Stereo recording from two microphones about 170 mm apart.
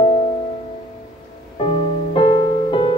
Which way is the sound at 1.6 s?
35° left (ahead or behind).